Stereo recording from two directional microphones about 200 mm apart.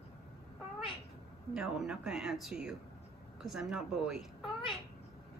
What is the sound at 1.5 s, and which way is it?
Speech, centre (ahead or behind).